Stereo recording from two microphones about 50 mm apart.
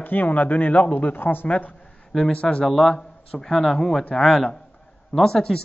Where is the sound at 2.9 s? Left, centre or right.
Centre.